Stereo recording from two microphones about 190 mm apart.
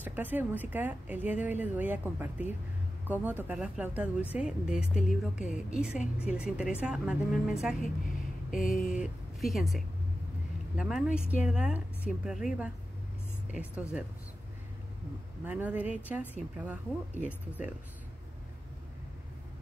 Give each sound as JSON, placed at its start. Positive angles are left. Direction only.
{"t": 0.0, "sound": "a woman's voice", "side_deg": -10}
{"t": 7.8, "sound": "a sound", "side_deg": 45}
{"t": 8.5, "sound": "a woman's voice", "side_deg": 0}
{"t": 15.4, "sound": "a woman's voice", "side_deg": -10}